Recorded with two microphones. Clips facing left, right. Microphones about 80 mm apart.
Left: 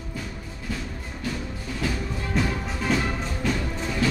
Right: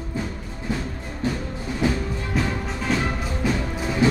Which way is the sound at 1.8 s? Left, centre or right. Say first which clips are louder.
Right 6 dB; right.